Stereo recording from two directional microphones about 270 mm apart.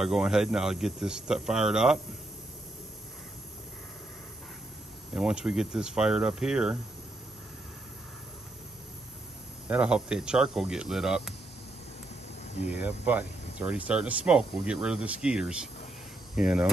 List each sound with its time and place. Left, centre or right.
0.0 s speech: centre
5.1 s speech: centre
9.7 s speech: centre
12.6 s speech: centre